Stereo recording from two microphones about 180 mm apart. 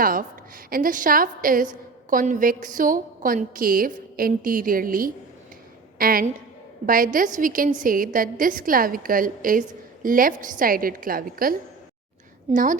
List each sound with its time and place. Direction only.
0.0 s a woman's voice: 50° right (ahead or behind)
12.5 s a woman's voice: 45° right (ahead or behind)